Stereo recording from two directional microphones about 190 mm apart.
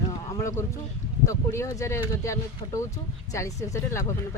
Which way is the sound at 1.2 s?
15° left (ahead or behind).